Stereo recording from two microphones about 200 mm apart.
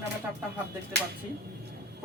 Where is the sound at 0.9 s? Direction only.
60° right (ahead or behind).